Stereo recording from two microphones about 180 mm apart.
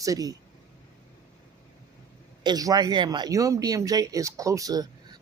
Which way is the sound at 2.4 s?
20° right (ahead or behind).